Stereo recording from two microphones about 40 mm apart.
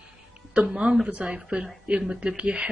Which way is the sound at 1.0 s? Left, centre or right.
Right.